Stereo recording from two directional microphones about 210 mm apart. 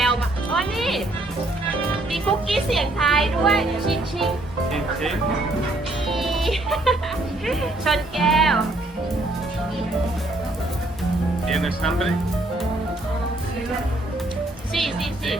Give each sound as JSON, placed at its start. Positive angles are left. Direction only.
{"t": 0.0, "sound": "music", "side_deg": 0}
{"t": 2.1, "sound": "speech", "side_deg": 0}
{"t": 6.1, "sound": "speech", "side_deg": 0}
{"t": 11.4, "sound": "speech", "side_deg": 0}
{"t": 14.7, "sound": "speech", "side_deg": 0}